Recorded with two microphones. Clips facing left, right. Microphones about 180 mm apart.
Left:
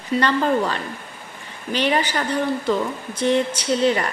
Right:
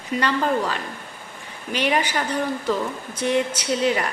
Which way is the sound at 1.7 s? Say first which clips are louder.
Left 1 dB; 10° right (ahead or behind).